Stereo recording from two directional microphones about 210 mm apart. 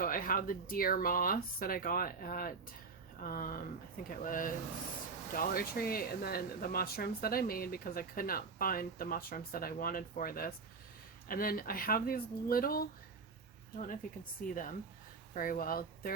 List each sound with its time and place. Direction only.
0.0 s speech: 40° left (ahead or behind)